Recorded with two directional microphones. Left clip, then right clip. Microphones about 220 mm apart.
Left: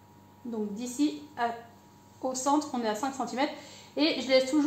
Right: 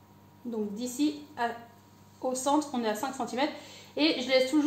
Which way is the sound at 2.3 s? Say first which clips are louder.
Even; 20° left (ahead or behind).